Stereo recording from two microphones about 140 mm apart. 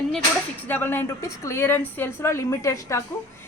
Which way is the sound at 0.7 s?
15° left (ahead or behind).